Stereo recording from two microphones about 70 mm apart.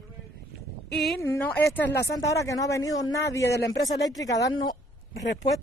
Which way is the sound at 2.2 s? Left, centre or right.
Left.